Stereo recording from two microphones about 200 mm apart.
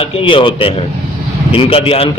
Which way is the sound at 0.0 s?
25° left (ahead or behind).